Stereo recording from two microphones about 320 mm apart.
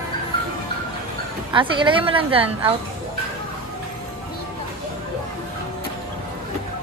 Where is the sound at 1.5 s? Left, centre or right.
Centre.